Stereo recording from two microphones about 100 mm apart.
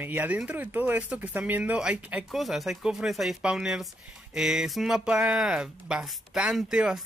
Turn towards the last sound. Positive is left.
turn(degrees=-5)  # may be behind; listen again after turning